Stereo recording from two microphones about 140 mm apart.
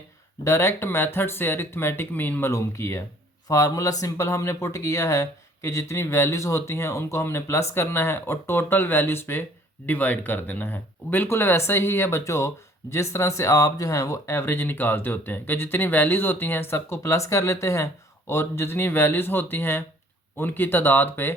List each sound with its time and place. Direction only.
0.4 s speech: 20° left (ahead or behind)